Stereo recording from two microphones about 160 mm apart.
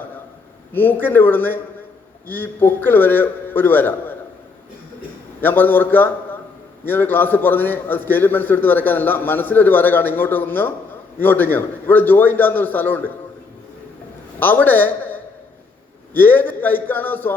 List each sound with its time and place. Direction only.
0.7 s a man's voice: 10° left (ahead or behind)
5.4 s a man's voice: 10° left (ahead or behind)
14.3 s a man's voice: 10° left (ahead or behind)